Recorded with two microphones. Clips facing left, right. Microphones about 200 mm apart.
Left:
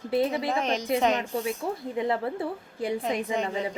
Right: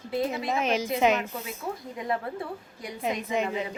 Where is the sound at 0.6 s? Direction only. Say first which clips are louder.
Right 2 dB; 5° right (ahead or behind).